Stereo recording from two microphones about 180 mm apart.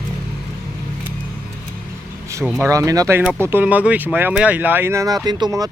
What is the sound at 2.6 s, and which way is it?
Speech, 15° right (ahead or behind).